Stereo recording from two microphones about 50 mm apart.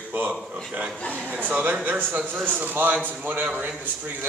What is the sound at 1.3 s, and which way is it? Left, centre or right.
Speech, right.